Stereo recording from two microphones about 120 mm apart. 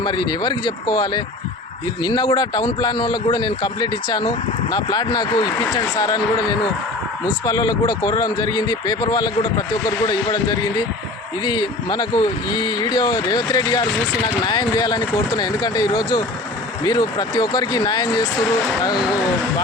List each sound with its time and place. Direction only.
0.0 s speech: 35° left (ahead or behind)